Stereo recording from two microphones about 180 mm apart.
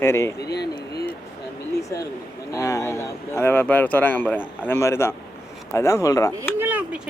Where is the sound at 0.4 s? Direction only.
70° left (ahead or behind).